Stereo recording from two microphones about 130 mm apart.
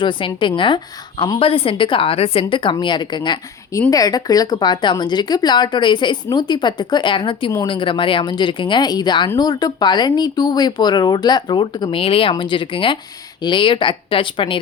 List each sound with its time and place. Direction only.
0.0 s a woman's voice: 40° left (ahead or behind)